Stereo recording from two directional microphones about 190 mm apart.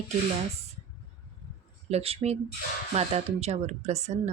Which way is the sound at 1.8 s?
35° right (ahead or behind).